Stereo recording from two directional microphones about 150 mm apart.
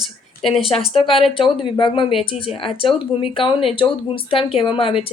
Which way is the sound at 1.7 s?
35° left (ahead or behind).